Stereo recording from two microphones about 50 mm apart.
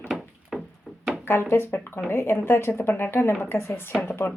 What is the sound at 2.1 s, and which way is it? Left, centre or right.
A woman's voice, left.